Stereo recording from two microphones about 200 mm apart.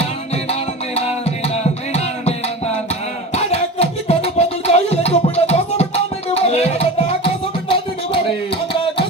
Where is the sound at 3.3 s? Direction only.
30° left (ahead or behind).